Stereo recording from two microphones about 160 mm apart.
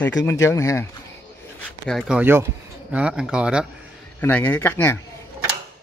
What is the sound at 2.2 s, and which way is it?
A man's voice, 15° right (ahead or behind).